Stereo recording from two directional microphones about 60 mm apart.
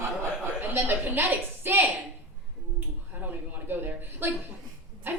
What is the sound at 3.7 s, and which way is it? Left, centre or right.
Speech, right.